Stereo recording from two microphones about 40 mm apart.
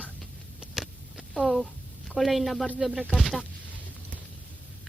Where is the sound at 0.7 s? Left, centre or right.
Centre.